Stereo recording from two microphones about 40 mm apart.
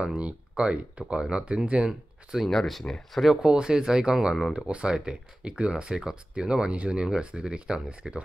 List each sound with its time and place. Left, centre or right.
0.1 s speech: right
1.9 s speech: centre
3.2 s speech: centre
4.6 s speech: right; by 8.2 s centre